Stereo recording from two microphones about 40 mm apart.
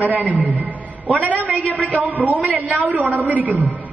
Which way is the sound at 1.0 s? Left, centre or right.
Right.